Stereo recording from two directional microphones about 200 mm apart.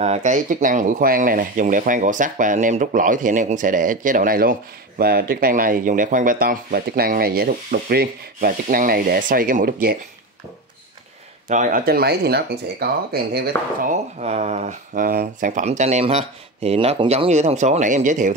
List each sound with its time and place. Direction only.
0.0 s speech: 35° right (ahead or behind)
11.4 s speech: 40° right (ahead or behind)
13.9 s speech: 35° right (ahead or behind)